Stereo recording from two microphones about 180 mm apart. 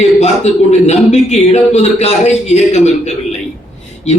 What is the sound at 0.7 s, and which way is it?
A man's voice, 40° left (ahead or behind).